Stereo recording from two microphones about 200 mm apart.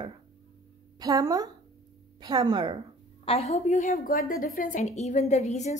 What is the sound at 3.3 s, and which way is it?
A woman's voice, 30° left (ahead or behind).